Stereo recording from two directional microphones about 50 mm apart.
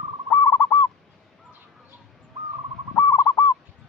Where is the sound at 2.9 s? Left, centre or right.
Left.